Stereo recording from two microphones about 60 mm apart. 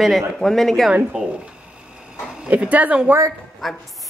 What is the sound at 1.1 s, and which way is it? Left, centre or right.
Speech, centre.